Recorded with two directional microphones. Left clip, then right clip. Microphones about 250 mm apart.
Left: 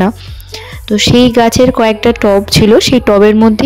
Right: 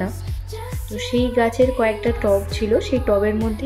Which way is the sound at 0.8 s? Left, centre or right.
Left.